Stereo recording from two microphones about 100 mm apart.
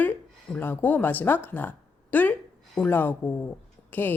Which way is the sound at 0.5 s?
20° left (ahead or behind).